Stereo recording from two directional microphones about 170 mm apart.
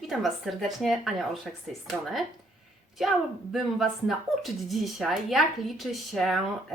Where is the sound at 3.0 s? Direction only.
Centre (ahead or behind).